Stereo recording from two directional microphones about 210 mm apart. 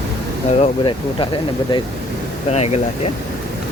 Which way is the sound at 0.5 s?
25° left (ahead or behind).